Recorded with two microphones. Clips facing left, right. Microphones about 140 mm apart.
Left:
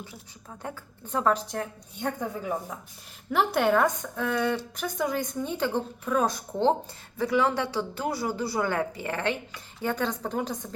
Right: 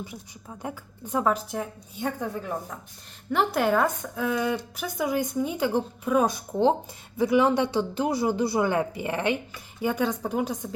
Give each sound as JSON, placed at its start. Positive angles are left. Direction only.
{"t": 0.6, "sound": "a woman's voice", "side_deg": -10}